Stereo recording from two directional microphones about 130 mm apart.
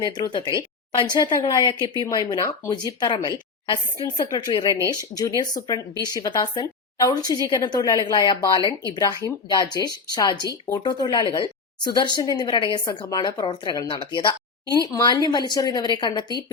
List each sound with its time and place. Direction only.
0.0 s a woman's voice: 35° left (ahead or behind)